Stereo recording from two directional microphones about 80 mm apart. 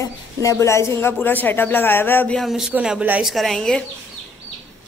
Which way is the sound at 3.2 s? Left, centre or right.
Centre.